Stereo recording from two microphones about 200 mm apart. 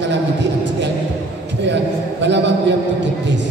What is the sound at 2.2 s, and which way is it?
Speech, 65° right (ahead or behind).